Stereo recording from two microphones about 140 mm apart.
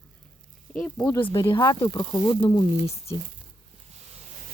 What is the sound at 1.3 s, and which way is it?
Speech, 25° left (ahead or behind).